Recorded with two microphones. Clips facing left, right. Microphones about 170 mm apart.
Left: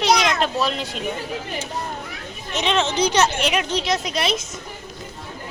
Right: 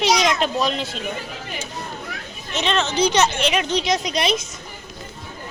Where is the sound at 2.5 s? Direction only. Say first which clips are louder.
Left 1 dB; 10° left (ahead or behind).